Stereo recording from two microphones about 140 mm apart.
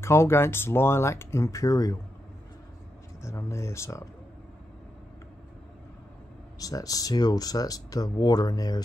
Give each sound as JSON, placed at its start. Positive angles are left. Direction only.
{"t": 0.0, "sound": "speech", "side_deg": 20}
{"t": 3.2, "sound": "speech", "side_deg": 20}
{"t": 6.6, "sound": "speech", "side_deg": 25}